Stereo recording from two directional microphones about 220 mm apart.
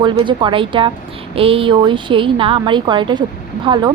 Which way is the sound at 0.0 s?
20° right (ahead or behind).